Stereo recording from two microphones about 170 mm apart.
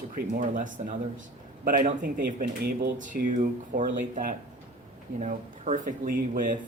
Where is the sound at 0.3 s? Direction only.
50° right (ahead or behind).